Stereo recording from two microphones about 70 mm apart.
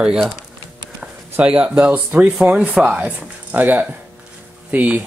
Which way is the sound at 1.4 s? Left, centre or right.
Centre.